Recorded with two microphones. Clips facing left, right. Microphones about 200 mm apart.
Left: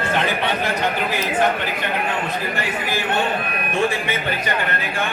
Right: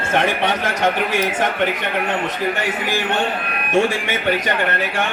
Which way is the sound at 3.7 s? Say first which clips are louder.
Right 4 dB; 80° right.